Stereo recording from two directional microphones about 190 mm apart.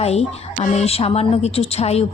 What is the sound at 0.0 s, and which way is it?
A woman's voice, 35° left (ahead or behind).